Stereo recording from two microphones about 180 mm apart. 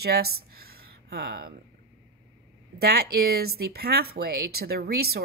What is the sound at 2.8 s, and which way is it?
Speech, 60° right (ahead or behind).